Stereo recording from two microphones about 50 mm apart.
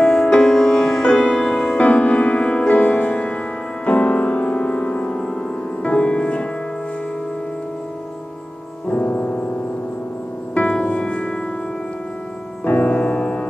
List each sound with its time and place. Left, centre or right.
0.0 s music: centre
8.9 s piano: left
10.9 s music: centre
12.6 s music: left